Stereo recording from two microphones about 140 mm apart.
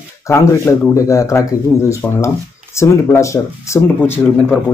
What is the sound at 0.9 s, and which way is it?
Speech, 20° left (ahead or behind).